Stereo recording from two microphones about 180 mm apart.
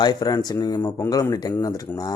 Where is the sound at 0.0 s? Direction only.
25° left (ahead or behind).